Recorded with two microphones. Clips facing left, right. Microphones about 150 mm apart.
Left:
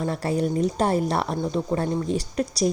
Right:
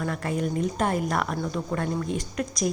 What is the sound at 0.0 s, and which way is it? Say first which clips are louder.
A woman's voice: left 4 dB; 35° left (ahead or behind).